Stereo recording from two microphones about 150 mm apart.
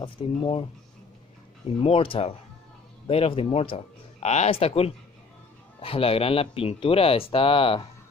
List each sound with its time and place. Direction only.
0.0 s speech: 35° left (ahead or behind)
1.8 s speech: 35° left (ahead or behind)